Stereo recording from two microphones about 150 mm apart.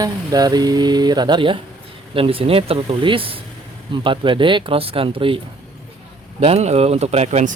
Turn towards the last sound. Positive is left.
turn(degrees=-50)  # may be behind; listen again after turning